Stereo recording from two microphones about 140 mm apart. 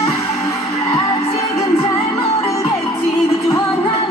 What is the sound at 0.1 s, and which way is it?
Music, 45° left (ahead or behind).